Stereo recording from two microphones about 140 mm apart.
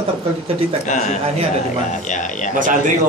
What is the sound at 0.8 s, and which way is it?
A man's voice, 60° left (ahead or behind).